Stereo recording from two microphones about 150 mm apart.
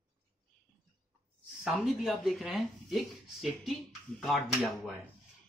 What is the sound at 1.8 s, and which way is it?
Speech, centre (ahead or behind).